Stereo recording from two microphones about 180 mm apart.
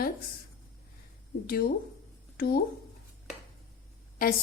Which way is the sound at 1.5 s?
55° left (ahead or behind).